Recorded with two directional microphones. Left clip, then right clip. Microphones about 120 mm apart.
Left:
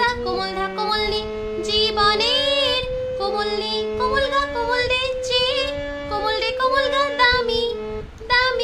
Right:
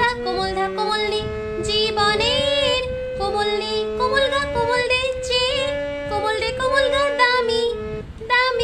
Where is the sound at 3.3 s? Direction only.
15° right (ahead or behind).